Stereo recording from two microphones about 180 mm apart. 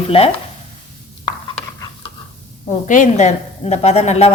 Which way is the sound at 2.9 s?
45° left (ahead or behind).